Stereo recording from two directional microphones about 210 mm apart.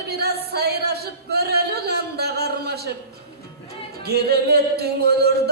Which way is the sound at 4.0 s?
50° right (ahead or behind).